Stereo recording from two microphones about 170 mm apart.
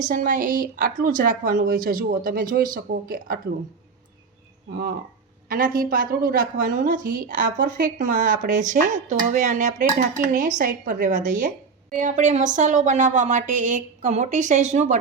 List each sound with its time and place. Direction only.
0.0 s a woman's voice: 50° right (ahead or behind)
5.5 s a woman's voice: 60° right (ahead or behind)